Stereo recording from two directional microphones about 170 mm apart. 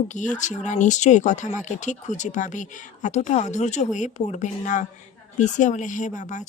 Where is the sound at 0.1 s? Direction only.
45° left (ahead or behind).